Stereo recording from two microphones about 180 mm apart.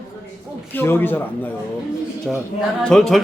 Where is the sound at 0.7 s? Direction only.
10° left (ahead or behind).